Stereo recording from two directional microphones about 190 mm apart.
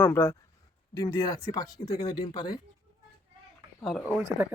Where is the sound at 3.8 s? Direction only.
Centre (ahead or behind).